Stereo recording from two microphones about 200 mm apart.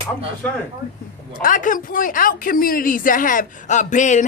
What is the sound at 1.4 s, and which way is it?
A woman's voice, 40° left (ahead or behind).